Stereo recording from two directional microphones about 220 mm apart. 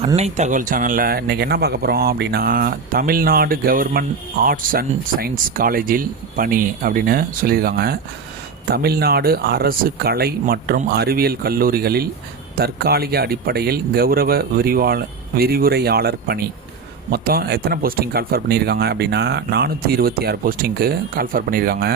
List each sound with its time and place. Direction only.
0.2 s speech: 30° right (ahead or behind)